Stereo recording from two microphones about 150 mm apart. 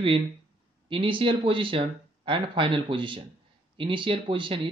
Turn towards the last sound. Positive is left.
turn(degrees=-35)  # may be behind; listen again after turning